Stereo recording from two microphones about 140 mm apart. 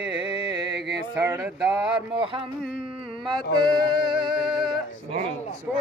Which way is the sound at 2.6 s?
5° right (ahead or behind).